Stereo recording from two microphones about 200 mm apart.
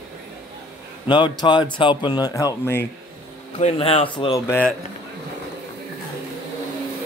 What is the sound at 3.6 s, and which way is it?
Speech, 30° left (ahead or behind).